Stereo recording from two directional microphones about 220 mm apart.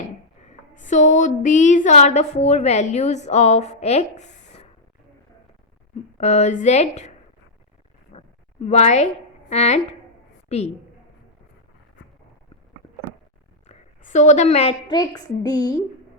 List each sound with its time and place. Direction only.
0.7 s a woman's voice: 35° left (ahead or behind)
6.1 s a woman's voice: 30° left (ahead or behind)
8.1 s a sound: 30° left (ahead or behind)
8.6 s a woman's voice: 30° left (ahead or behind)
13.7 s a woman's voice: 30° left (ahead or behind)